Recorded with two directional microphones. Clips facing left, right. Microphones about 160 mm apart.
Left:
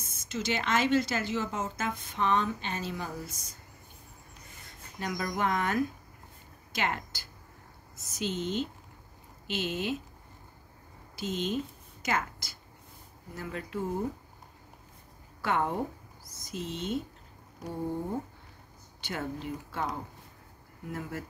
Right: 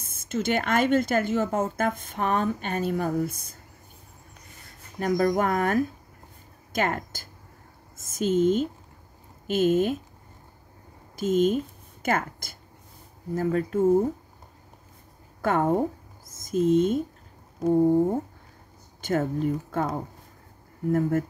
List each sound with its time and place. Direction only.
0.0 s a woman's voice: 50° right (ahead or behind)
4.9 s a woman's voice: 45° right (ahead or behind)
11.1 s a woman's voice: 50° right (ahead or behind)
15.4 s a woman's voice: 45° right (ahead or behind)
18.9 s a woman's voice: 45° right (ahead or behind)